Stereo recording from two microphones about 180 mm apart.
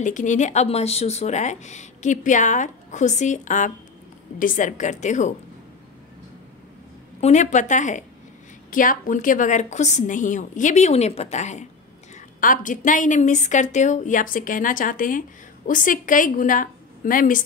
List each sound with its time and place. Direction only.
0.0 s a woman's voice: 45° left (ahead or behind)
7.2 s a woman's voice: 40° left (ahead or behind)